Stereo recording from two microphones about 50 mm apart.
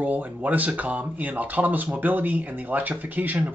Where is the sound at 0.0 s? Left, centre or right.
Right.